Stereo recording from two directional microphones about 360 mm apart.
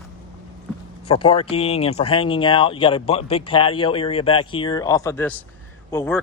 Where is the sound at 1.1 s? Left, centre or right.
Centre.